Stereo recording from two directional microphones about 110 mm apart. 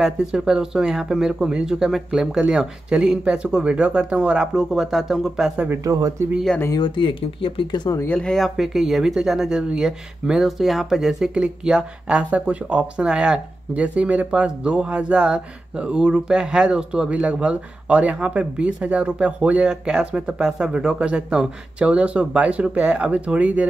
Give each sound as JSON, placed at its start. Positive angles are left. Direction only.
{"t": 0.0, "sound": "speech", "side_deg": -5}
{"t": 5.9, "sound": "speech", "side_deg": -30}
{"t": 6.8, "sound": "speech", "side_deg": 50}
{"t": 8.1, "sound": "speech", "side_deg": 5}